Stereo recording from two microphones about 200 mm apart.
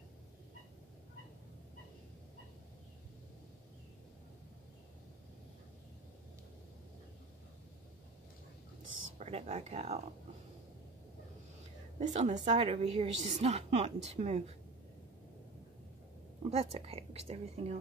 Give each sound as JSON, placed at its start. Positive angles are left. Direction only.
{"t": 9.2, "sound": "a woman's voice", "side_deg": -30}
{"t": 12.0, "sound": "a woman's voice", "side_deg": -35}
{"t": 16.4, "sound": "a woman's voice", "side_deg": -30}